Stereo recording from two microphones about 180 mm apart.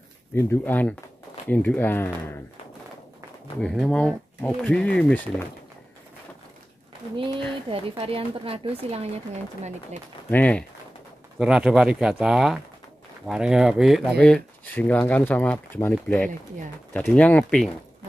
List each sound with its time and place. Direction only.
0.3 s speech: 15° left (ahead or behind)
3.6 s speech: 5° left (ahead or behind)
7.7 s speech: 30° right (ahead or behind)
10.3 s speech: 10° left (ahead or behind)
11.3 s speech: 5° right (ahead or behind)